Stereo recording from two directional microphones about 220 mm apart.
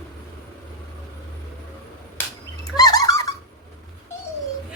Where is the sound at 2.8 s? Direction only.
15° left (ahead or behind).